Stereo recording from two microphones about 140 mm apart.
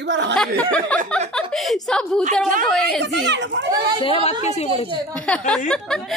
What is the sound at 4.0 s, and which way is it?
Speech, 40° left (ahead or behind).